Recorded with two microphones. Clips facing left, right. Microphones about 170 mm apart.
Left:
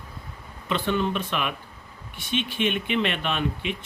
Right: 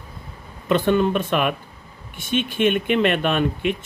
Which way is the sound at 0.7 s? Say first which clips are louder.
Right 7 dB; 50° right (ahead or behind).